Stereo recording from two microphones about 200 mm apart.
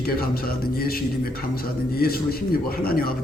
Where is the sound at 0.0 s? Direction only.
50° left (ahead or behind).